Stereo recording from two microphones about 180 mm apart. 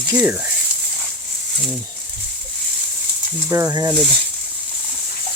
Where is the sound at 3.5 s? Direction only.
20° right (ahead or behind).